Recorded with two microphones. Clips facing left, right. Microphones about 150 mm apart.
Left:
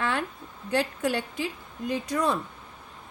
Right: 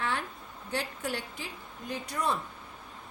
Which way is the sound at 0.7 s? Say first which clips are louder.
Left 8 dB; 85° left.